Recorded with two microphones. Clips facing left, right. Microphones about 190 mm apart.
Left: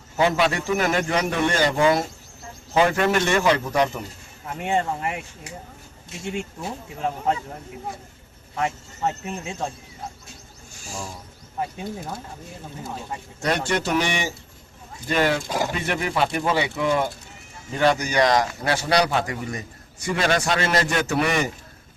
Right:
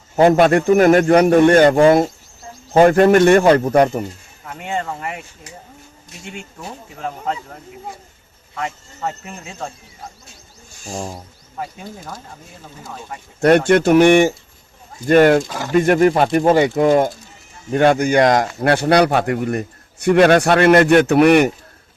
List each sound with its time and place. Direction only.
0.2 s a man's voice: 50° right (ahead or behind)
10.8 s a man's voice: 45° right (ahead or behind)
13.4 s a man's voice: 55° right (ahead or behind)